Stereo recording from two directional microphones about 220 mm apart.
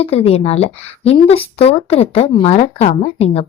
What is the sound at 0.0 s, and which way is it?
Speech, 25° left (ahead or behind).